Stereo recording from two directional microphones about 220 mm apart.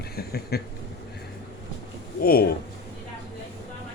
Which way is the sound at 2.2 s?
45° left (ahead or behind).